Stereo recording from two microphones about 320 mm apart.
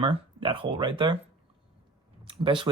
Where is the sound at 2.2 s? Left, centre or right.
Centre.